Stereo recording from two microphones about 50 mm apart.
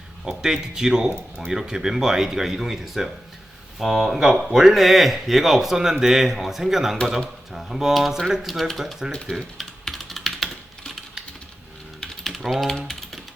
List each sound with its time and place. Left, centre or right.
0.3 s speech: centre
9.8 s typing: centre
11.9 s typing: centre